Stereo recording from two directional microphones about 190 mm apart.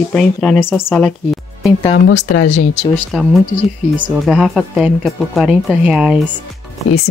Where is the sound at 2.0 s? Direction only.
70° left (ahead or behind).